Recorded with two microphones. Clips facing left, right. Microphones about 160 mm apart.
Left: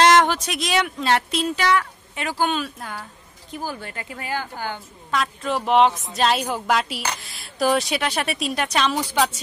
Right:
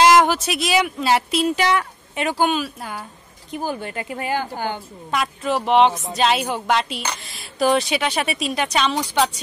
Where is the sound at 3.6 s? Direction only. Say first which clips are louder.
Right 5 dB; 20° right (ahead or behind); by 9.4 s centre (ahead or behind).